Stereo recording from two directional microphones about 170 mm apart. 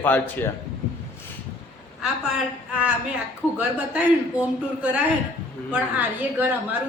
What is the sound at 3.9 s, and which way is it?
A man's voice, 5° right (ahead or behind).